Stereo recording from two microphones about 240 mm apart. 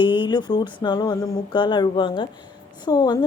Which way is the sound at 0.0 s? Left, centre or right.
Centre.